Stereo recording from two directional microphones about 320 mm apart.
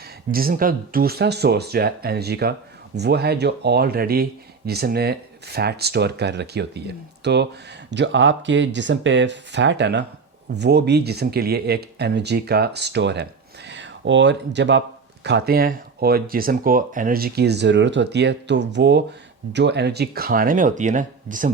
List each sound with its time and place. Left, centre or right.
0.3 s speech: right